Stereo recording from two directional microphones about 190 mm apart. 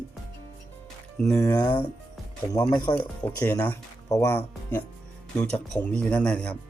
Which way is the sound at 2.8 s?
5° left (ahead or behind).